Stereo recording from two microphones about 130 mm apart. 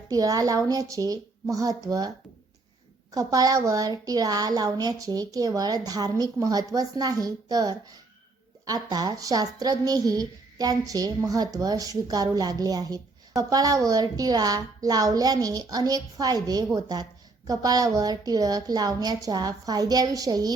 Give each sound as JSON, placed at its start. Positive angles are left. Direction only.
{"t": 0.1, "sound": "a woman's voice", "side_deg": -30}
{"t": 3.2, "sound": "a woman's voice", "side_deg": -30}